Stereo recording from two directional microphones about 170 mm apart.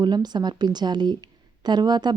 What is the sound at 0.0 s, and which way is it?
A woman's voice, 25° right (ahead or behind).